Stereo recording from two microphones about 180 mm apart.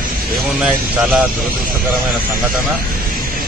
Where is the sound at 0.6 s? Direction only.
5° right (ahead or behind).